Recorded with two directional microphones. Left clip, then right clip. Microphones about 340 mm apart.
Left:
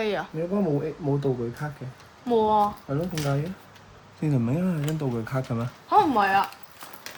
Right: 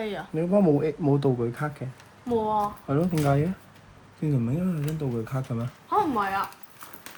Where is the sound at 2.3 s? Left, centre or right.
Left.